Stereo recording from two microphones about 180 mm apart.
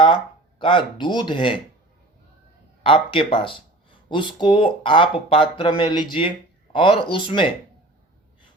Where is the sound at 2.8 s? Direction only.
30° left (ahead or behind).